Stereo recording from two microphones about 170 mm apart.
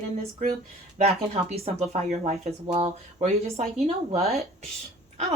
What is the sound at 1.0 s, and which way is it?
Speech, 40° right (ahead or behind).